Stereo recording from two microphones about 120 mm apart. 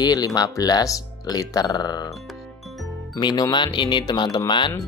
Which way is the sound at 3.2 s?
35° left (ahead or behind).